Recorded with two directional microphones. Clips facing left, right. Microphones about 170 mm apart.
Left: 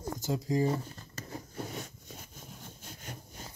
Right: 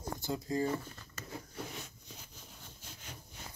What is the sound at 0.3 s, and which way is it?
Speech, 15° left (ahead or behind).